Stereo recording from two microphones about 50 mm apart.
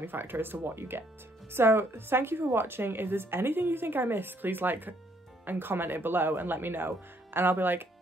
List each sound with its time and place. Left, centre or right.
0.0 s a woman's voice: right